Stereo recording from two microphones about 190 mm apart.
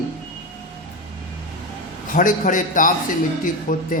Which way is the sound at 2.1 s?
45° left (ahead or behind).